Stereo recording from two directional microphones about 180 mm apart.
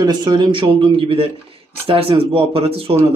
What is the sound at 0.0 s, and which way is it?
Speech, 25° right (ahead or behind).